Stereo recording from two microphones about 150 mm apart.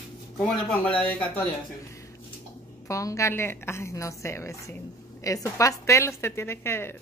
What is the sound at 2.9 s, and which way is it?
A woman's voice, 20° left (ahead or behind).